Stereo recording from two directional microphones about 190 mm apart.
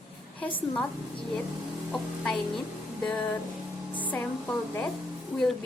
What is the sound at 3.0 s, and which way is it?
Speech, 10° left (ahead or behind).